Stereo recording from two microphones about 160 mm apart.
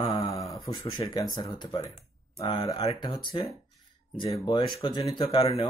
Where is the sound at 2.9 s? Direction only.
30° left (ahead or behind).